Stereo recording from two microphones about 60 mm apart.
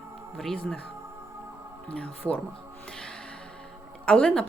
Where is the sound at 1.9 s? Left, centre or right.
Centre.